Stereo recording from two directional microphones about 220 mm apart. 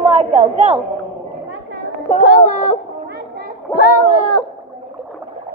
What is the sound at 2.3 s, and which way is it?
Speech, 35° left (ahead or behind).